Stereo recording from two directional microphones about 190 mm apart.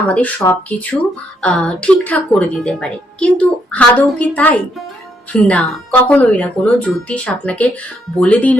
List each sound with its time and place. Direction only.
0.1 s speech: 10° left (ahead or behind)